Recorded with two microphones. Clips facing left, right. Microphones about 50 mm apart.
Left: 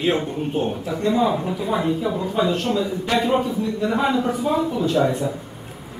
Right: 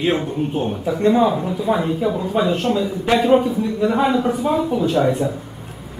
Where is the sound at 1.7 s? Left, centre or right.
Centre.